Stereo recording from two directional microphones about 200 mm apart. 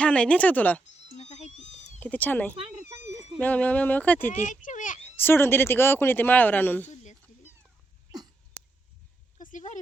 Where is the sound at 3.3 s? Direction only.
5° left (ahead or behind).